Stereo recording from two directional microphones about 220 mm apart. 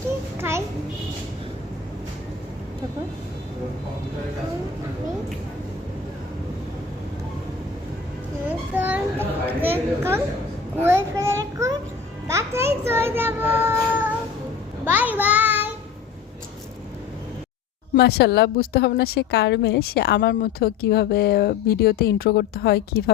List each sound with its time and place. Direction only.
0.3 s a sound: 10° right (ahead or behind)
8.4 s a child's voice: 10° right (ahead or behind)
14.8 s child singing: 10° right (ahead or behind)
17.9 s a woman's voice: 45° left (ahead or behind)